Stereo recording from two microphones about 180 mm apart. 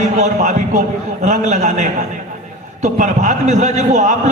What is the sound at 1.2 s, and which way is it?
Speech, 40° right (ahead or behind).